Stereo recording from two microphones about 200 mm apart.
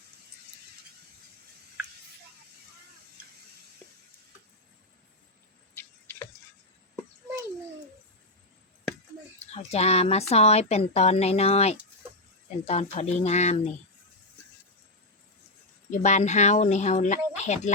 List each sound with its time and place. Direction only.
5.7 s a sound: 10° left (ahead or behind)
9.4 s speech: 30° left (ahead or behind)
15.9 s speech: 35° left (ahead or behind)